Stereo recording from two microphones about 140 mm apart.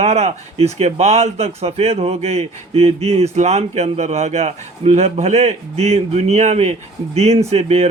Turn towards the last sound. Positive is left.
turn(degrees=-50)  # may be behind; listen again after turning